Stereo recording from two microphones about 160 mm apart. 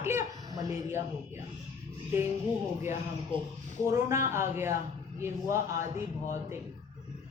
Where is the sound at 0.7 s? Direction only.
15° right (ahead or behind).